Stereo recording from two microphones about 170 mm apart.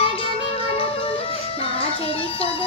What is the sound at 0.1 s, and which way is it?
Music, 35° left (ahead or behind).